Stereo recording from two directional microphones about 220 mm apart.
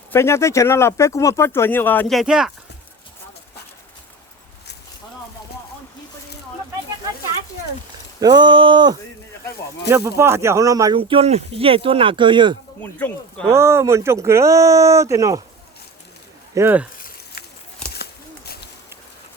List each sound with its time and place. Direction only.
0.1 s speech: 10° left (ahead or behind)
8.2 s speech: 20° right (ahead or behind)
16.6 s speech: 10° right (ahead or behind)
17.4 s a sound: 45° left (ahead or behind)